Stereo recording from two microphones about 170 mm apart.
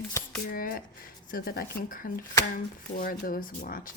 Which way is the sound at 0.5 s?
60° left (ahead or behind).